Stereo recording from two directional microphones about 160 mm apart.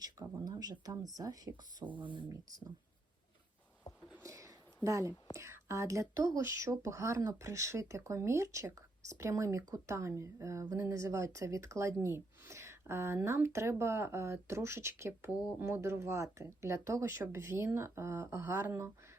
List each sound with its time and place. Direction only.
0.0 s speech: 20° right (ahead or behind)
1.8 s speech: 10° right (ahead or behind)
2.0 s speech: 25° right (ahead or behind)
4.2 s a sound: 20° right (ahead or behind)
5.4 s speech: 15° right (ahead or behind)